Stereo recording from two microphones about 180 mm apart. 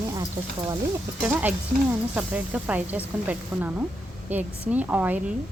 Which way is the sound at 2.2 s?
10° right (ahead or behind).